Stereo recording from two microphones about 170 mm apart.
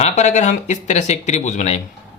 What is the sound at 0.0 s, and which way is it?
Speech, 45° left (ahead or behind).